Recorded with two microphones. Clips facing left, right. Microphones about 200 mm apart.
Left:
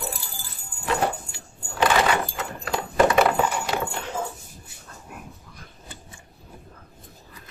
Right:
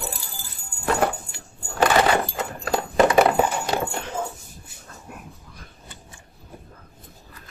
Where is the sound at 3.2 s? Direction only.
35° right (ahead or behind).